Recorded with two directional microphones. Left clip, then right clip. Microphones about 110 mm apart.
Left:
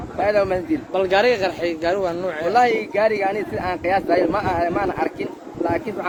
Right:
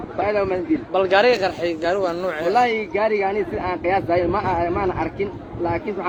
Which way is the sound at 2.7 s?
75° left (ahead or behind).